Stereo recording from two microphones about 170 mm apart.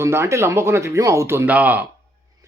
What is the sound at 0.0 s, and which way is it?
Speech, 15° right (ahead or behind).